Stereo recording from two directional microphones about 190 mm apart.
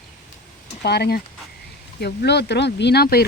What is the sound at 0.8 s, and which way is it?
Speech, 60° left (ahead or behind).